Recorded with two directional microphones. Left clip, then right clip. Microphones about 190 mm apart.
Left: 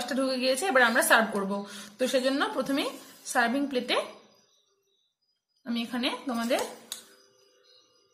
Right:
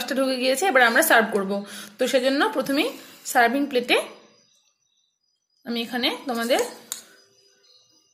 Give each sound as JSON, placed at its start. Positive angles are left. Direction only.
{"t": 0.0, "sound": "speech", "side_deg": -25}
{"t": 5.6, "sound": "speech", "side_deg": -25}